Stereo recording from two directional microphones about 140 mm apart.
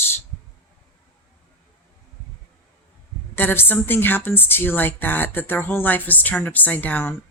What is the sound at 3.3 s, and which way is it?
A woman's voice, 15° left (ahead or behind).